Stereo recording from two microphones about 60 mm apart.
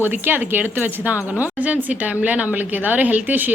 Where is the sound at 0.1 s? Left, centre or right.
Right.